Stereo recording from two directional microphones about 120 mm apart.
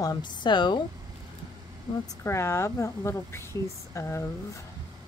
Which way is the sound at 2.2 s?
20° left (ahead or behind).